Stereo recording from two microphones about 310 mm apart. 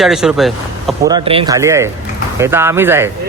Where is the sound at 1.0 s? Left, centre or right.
Centre.